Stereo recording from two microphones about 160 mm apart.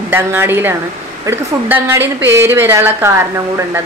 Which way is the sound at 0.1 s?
15° right (ahead or behind).